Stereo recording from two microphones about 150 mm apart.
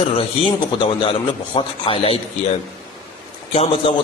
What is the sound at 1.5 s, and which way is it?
Speech, 40° left (ahead or behind).